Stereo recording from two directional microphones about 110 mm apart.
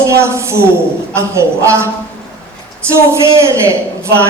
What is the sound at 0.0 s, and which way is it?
A man's voice, 25° right (ahead or behind).